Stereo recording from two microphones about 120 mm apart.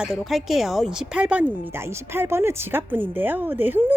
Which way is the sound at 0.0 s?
Centre (ahead or behind).